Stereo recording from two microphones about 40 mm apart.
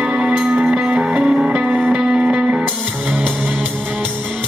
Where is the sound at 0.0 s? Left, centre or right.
Right.